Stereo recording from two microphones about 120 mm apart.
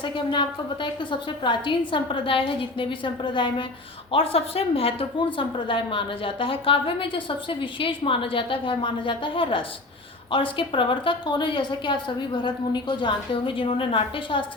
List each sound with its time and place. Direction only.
0.0 s a woman's voice: 40° left (ahead or behind)
4.1 s a woman's voice: 55° left (ahead or behind)